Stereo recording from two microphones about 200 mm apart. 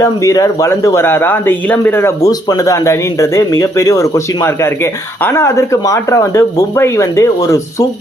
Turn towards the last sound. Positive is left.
turn(degrees=15)  # may be behind; listen again after turning